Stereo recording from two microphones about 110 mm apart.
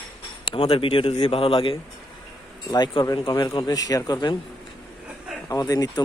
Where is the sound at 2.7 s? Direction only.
40° left (ahead or behind).